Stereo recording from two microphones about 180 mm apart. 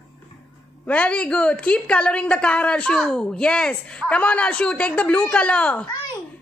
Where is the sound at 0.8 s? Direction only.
5° left (ahead or behind).